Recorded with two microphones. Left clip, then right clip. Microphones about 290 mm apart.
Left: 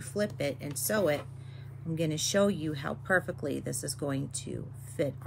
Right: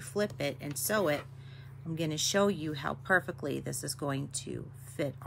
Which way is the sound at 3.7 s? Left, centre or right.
Right.